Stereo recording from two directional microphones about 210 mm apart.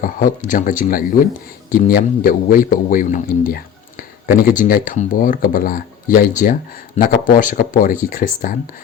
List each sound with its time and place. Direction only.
0.0 s a man's voice: 40° left (ahead or behind)